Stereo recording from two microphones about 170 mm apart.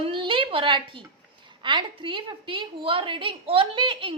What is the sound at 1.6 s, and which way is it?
A woman's voice, 30° right (ahead or behind).